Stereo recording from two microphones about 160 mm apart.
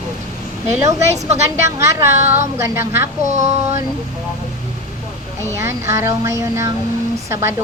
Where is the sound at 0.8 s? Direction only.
20° right (ahead or behind).